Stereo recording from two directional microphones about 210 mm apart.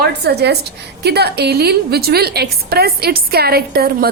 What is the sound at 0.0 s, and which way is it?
A woman's voice, 50° right (ahead or behind).